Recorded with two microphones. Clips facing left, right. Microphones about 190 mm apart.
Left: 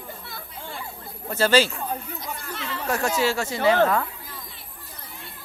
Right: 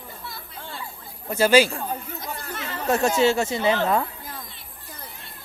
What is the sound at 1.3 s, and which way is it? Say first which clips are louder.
Speech: right 3 dB; 10° right (ahead or behind).